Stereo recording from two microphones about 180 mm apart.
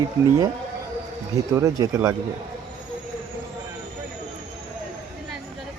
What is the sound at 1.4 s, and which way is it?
Speech, 20° right (ahead or behind).